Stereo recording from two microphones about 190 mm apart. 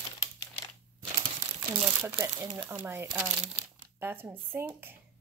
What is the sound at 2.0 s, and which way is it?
Speech, 15° right (ahead or behind).